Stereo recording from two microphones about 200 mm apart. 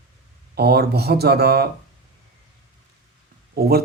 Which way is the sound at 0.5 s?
55° right (ahead or behind).